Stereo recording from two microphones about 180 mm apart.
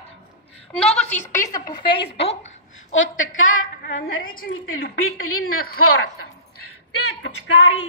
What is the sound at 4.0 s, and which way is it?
Speech, 50° left (ahead or behind).